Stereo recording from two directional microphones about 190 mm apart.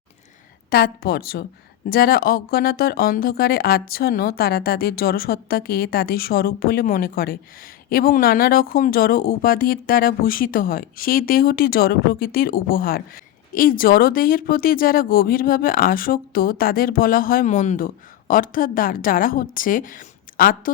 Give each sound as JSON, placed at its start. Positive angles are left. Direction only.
{"t": 0.7, "sound": "speech", "side_deg": 55}